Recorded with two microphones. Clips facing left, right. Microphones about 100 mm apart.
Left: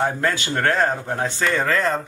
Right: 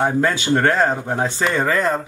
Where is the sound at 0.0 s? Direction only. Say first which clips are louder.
Right 3 dB; 20° right (ahead or behind).